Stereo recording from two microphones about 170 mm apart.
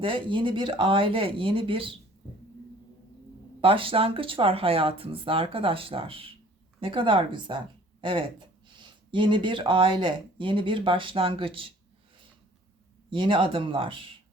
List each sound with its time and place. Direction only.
0.0 s speech: 30° right (ahead or behind)
3.6 s speech: 30° right (ahead or behind)
13.1 s speech: 30° right (ahead or behind)